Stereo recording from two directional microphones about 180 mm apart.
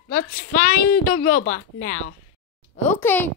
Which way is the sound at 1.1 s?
50° left (ahead or behind).